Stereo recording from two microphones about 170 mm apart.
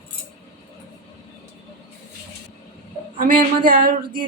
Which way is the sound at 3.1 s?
55° right (ahead or behind).